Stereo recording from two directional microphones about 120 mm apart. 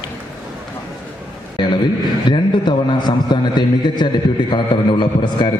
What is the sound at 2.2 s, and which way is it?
A man's voice, 40° left (ahead or behind).